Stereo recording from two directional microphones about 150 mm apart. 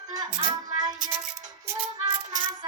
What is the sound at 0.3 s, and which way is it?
Music, 25° right (ahead or behind).